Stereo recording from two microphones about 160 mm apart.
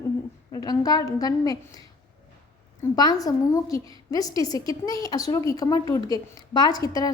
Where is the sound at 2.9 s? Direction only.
25° left (ahead or behind).